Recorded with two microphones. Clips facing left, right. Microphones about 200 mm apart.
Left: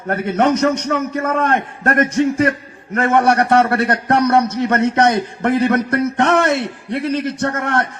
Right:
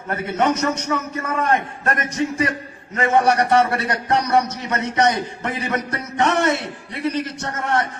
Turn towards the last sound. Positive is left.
turn(degrees=65)  # may be behind; listen again after turning